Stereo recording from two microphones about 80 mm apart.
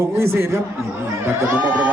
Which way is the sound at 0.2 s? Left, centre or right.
Right.